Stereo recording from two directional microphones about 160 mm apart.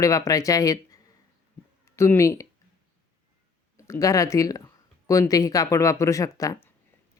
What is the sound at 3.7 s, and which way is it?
Speech, 20° left (ahead or behind).